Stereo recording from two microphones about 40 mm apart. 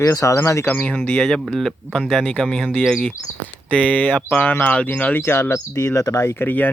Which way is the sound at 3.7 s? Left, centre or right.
Left.